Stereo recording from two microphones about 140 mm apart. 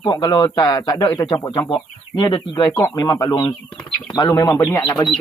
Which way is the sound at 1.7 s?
35° left (ahead or behind).